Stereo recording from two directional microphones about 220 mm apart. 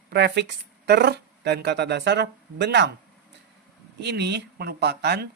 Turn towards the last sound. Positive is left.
turn(degrees=-50)  # may be behind; listen again after turning